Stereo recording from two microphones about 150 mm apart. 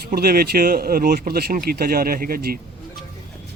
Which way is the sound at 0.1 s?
90° right.